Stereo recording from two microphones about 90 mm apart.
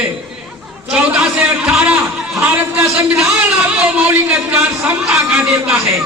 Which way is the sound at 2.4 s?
20° right (ahead or behind).